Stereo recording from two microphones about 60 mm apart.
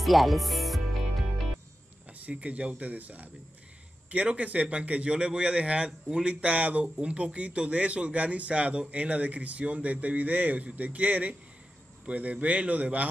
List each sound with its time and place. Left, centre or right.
0.0 s speech: centre
2.0 s a man's voice: right